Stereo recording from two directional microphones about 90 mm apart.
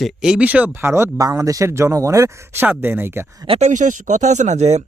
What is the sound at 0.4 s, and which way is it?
Speech, 15° right (ahead or behind).